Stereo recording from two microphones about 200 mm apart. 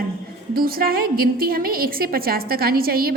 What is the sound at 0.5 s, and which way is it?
A woman's voice, 50° right (ahead or behind).